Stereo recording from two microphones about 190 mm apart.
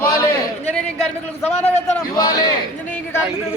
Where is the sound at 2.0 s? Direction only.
20° left (ahead or behind).